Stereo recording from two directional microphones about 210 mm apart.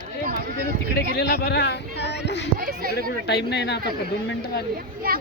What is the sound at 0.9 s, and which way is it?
A man's voice, 50° left (ahead or behind).